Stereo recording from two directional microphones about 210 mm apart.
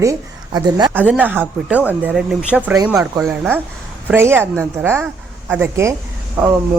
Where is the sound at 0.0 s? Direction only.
15° right (ahead or behind).